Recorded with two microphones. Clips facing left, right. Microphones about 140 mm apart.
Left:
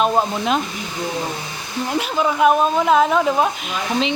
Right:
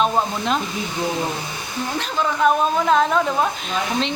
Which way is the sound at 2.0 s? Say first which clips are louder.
Left 4 dB; 10° left (ahead or behind).